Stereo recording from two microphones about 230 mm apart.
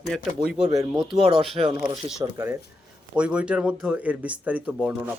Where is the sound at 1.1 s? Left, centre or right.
Right.